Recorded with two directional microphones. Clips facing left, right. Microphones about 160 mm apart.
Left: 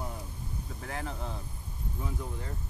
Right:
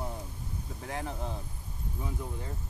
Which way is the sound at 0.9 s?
20° right (ahead or behind).